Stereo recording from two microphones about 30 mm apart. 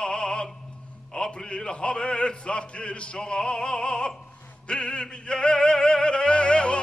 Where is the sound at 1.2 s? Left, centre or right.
Left.